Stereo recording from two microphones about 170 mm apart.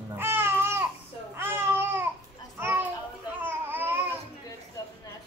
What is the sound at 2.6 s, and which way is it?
Children playing, 10° right (ahead or behind).